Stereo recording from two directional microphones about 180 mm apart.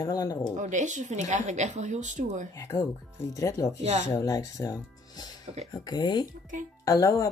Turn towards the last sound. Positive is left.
turn(degrees=20)  # may be behind; listen again after turning